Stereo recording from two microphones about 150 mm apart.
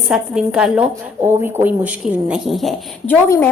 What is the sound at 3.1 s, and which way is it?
Speech, 15° left (ahead or behind).